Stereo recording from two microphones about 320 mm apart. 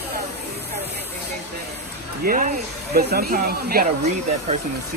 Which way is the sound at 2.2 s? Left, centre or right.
Right.